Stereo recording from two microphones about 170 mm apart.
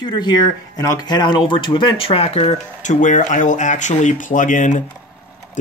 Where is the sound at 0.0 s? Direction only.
25° left (ahead or behind).